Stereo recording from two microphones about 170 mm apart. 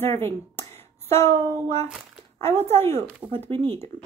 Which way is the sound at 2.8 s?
15° left (ahead or behind).